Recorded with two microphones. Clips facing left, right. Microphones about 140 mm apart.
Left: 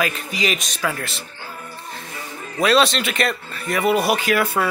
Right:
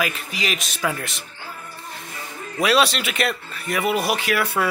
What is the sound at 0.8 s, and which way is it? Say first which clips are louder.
Speech: even; 20° right (ahead or behind).